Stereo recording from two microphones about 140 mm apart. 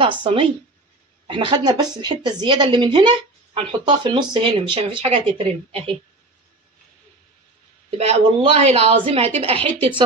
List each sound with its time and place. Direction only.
0.0 s speech: 35° right (ahead or behind)
8.0 s a woman's voice: 50° right (ahead or behind)